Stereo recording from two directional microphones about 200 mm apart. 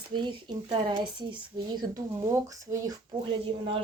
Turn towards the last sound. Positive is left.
turn(degrees=-25)  # may be behind; listen again after turning